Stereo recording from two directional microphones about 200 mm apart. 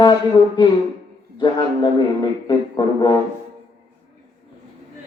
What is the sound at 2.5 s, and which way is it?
Speech, 20° left (ahead or behind).